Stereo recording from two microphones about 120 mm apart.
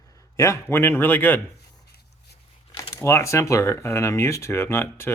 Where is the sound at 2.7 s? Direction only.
25° left (ahead or behind).